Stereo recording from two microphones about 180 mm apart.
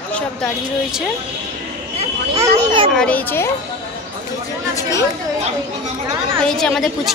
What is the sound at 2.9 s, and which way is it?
Speech, 10° left (ahead or behind).